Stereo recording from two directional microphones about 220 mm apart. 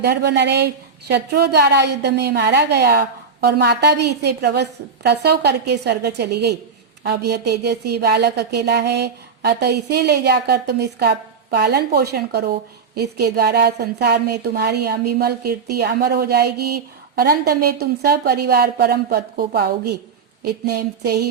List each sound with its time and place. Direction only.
0.0 s speech: 45° right (ahead or behind)